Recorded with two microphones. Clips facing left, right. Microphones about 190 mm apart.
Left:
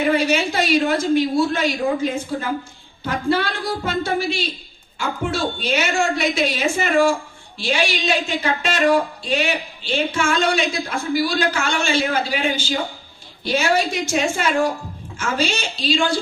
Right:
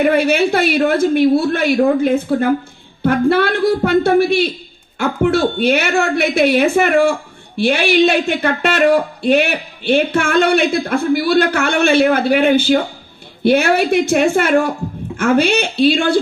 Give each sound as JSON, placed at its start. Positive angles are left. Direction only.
{"t": 0.0, "sound": "a woman's voice", "side_deg": -60}